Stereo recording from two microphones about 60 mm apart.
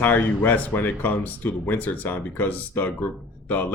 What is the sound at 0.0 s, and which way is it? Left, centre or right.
Speech, left.